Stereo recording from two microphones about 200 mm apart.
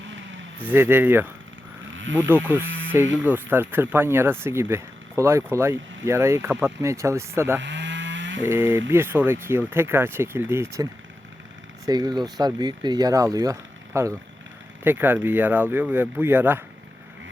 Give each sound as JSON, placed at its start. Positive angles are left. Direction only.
{"t": 0.6, "sound": "speech", "side_deg": -10}
{"t": 7.6, "sound": "a sound", "side_deg": -65}
{"t": 8.4, "sound": "speech", "side_deg": -10}
{"t": 11.9, "sound": "speech", "side_deg": -20}